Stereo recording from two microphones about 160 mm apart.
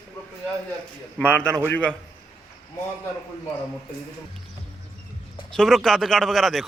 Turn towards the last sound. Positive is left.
turn(degrees=0)  # may be behind; listen again after turning